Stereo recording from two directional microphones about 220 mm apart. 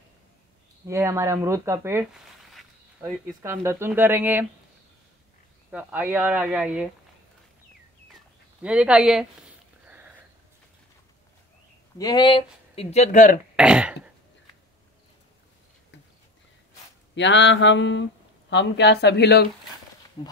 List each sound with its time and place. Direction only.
0.8 s speech: 10° right (ahead or behind)
5.7 s speech: 5° right (ahead or behind)
8.6 s speech: 5° right (ahead or behind)
12.0 s speech: 20° left (ahead or behind); by 13.4 s 35° left (ahead or behind)
13.6 s throat clearing: 5° right (ahead or behind)
17.1 s mantra: 55° left (ahead or behind)
18.5 s speech: 50° left (ahead or behind)
20.2 s speech: 20° left (ahead or behind)